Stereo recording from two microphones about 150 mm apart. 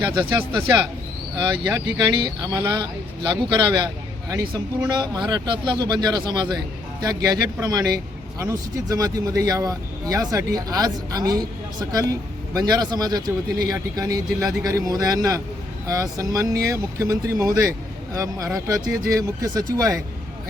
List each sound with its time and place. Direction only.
1.7 s a man's voice: 25° right (ahead or behind)